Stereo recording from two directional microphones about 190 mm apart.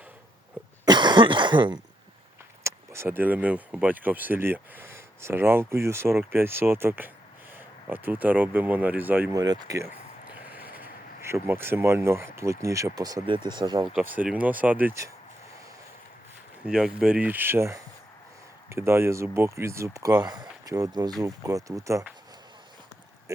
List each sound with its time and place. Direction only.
0.9 s cough: 25° right (ahead or behind)
2.6 s speech: 15° right (ahead or behind)
13.9 s speech: 10° right (ahead or behind)
16.6 s speech: 5° right (ahead or behind)